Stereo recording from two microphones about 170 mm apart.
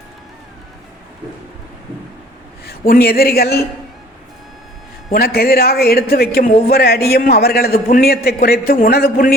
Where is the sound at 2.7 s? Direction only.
65° left (ahead or behind).